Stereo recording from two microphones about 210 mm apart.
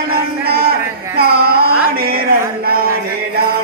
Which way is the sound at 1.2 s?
45° right (ahead or behind).